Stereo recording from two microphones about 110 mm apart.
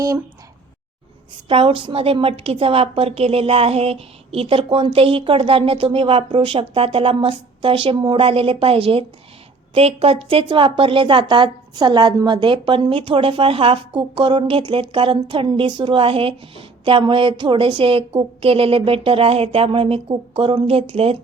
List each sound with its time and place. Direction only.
1.5 s a woman's voice: 55° right (ahead or behind)